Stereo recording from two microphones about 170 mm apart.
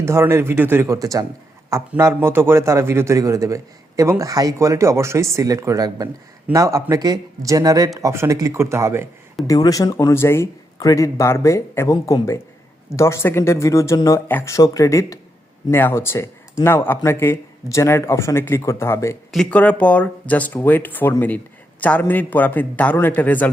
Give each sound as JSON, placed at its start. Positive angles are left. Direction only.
{"t": 0.0, "sound": "a man's voice", "side_deg": -15}
{"t": 9.5, "sound": "speech", "side_deg": 20}
{"t": 19.3, "sound": "speech", "side_deg": 5}